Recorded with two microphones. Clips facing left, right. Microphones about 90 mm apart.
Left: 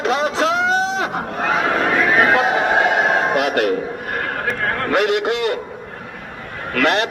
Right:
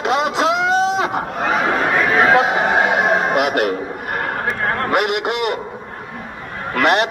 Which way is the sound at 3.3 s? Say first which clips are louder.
Even; 15° right (ahead or behind).